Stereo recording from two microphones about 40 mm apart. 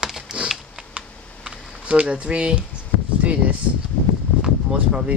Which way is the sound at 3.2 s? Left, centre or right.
Right.